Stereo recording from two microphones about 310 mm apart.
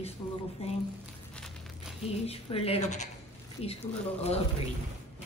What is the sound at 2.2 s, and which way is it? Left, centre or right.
Speech, centre.